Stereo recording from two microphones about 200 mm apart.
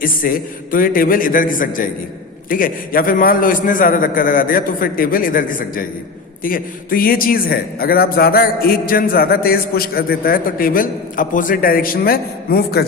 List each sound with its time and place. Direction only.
0.0 s a man's voice: 45° left (ahead or behind)